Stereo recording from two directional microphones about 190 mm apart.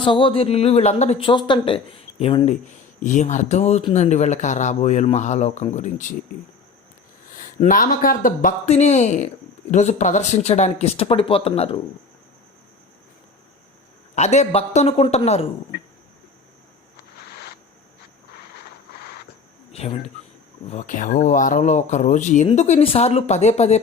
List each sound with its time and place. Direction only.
0.0 s speech: 25° left (ahead or behind)
7.3 s speech: 45° left (ahead or behind)
14.2 s speech: 35° left (ahead or behind)
19.7 s speech: 30° left (ahead or behind)